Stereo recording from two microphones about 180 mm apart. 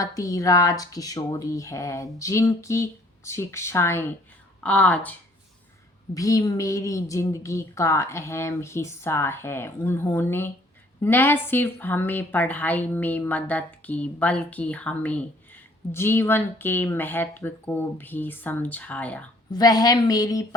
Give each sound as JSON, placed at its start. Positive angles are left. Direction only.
{"t": 0.0, "sound": "a woman's voice", "side_deg": 20}
{"t": 6.1, "sound": "a woman's voice", "side_deg": 20}
{"t": 19.5, "sound": "speech", "side_deg": 20}